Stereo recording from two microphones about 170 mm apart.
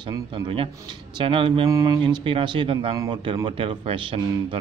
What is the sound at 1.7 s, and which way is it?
A man's voice, 20° right (ahead or behind).